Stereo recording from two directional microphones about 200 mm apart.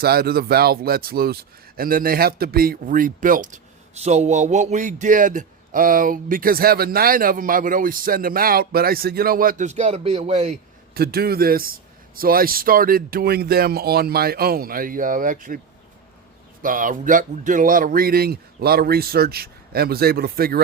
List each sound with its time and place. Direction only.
0.0 s speech: 50° right (ahead or behind); by 10.6 s 35° right (ahead or behind)
10.9 s speech: 50° right (ahead or behind)
16.6 s speech: 40° right (ahead or behind)